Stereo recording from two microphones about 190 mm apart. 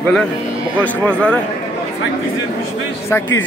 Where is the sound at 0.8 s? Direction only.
5° left (ahead or behind).